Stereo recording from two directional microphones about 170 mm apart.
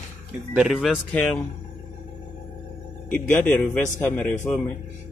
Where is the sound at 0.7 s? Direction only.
5° left (ahead or behind).